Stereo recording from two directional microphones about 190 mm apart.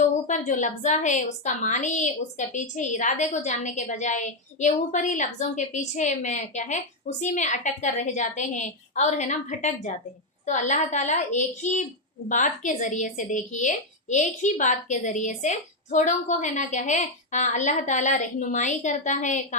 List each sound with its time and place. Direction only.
0.0 s a woman's voice: 40° left (ahead or behind)